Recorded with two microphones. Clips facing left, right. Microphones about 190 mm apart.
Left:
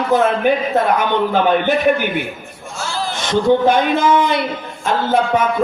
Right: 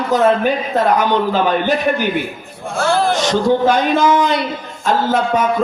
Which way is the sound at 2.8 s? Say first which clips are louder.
Right 9 dB; 60° right (ahead or behind).